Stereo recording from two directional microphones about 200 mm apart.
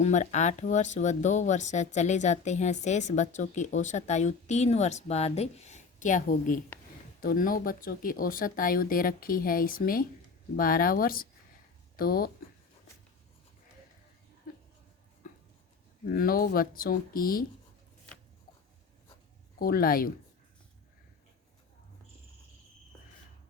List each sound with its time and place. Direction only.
0.0 s speech: 35° left (ahead or behind)
15.2 s a sound: 40° left (ahead or behind)
16.0 s speech: 45° left (ahead or behind)
19.5 s speech: 45° left (ahead or behind)